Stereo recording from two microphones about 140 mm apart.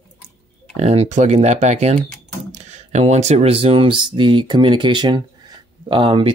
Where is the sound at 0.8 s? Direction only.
50° right (ahead or behind).